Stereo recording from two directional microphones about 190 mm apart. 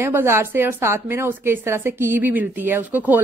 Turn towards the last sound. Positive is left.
turn(degrees=-10)  # may be behind; listen again after turning